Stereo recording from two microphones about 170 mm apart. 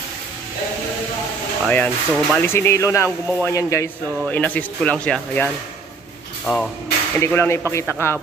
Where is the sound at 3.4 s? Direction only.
15° left (ahead or behind).